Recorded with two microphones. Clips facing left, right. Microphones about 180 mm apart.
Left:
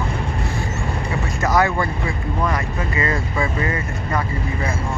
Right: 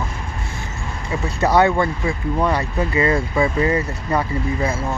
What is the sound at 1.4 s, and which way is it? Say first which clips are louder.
Speech: right 4 dB; 30° right (ahead or behind).